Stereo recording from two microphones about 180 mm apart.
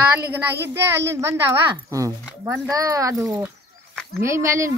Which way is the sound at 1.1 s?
15° right (ahead or behind).